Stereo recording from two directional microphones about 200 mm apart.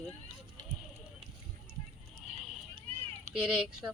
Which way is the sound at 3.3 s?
5° right (ahead or behind).